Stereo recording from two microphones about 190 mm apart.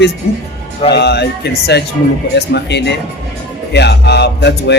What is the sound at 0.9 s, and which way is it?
A man's voice, 60° left (ahead or behind).